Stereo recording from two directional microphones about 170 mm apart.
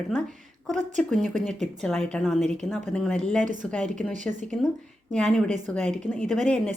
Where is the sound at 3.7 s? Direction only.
5° left (ahead or behind).